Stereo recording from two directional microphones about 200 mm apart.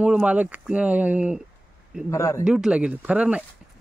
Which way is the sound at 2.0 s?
15° left (ahead or behind).